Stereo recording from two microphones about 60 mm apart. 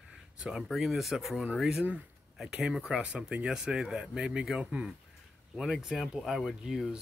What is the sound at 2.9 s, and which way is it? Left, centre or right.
Speech, centre.